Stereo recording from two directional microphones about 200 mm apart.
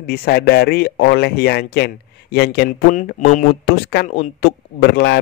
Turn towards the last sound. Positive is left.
turn(degrees=55)  # may be behind; listen again after turning